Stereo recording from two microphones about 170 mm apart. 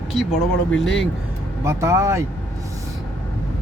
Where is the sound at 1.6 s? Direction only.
15° right (ahead or behind).